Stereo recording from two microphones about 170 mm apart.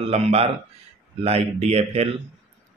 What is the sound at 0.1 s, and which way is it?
Speech, 35° right (ahead or behind).